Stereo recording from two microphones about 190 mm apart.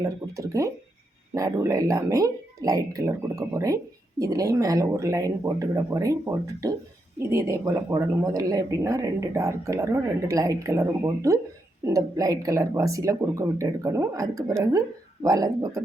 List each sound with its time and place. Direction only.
0.0 s speech: 15° right (ahead or behind)